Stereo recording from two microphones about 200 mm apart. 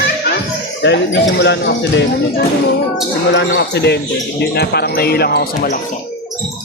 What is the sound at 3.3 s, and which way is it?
Speech, 60° left (ahead or behind).